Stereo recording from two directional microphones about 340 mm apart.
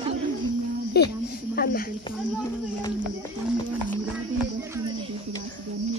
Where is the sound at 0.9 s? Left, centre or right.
Left.